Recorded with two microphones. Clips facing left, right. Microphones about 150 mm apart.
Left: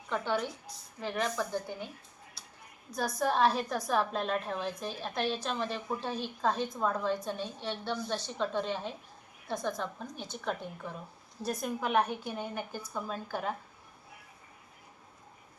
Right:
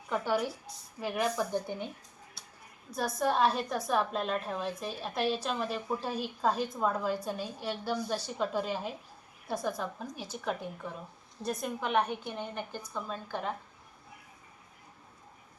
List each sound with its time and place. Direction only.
0.1 s a woman's voice: 10° right (ahead or behind)
2.4 s a sound: centre (ahead or behind)
3.2 s a woman's voice: centre (ahead or behind)